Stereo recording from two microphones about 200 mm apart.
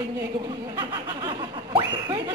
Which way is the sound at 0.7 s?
25° right (ahead or behind).